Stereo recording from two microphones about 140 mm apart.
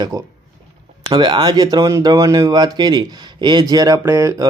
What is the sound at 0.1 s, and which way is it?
Speech, 25° right (ahead or behind).